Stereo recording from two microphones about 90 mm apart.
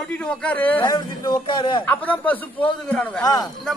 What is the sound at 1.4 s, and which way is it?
Speech, 65° left (ahead or behind).